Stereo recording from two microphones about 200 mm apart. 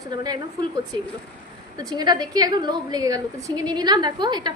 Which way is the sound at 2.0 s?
20° right (ahead or behind).